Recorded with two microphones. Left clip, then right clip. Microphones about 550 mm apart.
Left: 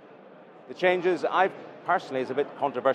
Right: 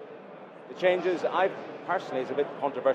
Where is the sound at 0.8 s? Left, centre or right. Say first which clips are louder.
Left 1 dB; left.